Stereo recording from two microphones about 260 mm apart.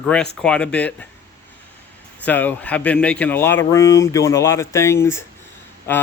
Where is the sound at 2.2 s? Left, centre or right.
Centre.